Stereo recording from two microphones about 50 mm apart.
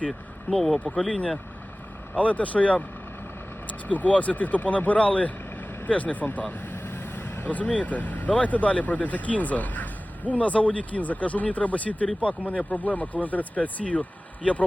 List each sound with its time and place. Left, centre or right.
0.5 s speech: left
0.9 s speech: left
6.5 s speech: left